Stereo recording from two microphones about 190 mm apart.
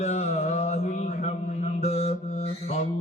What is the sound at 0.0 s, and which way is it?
Mantra, 35° left (ahead or behind).